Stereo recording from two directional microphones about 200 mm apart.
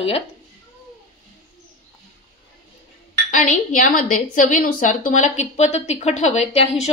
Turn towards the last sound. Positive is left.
turn(degrees=35)  # may be behind; listen again after turning